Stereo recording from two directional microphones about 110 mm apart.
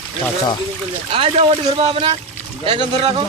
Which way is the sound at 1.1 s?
60° right (ahead or behind).